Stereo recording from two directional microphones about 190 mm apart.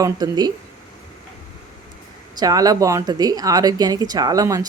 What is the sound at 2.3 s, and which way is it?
A woman's voice, 20° right (ahead or behind).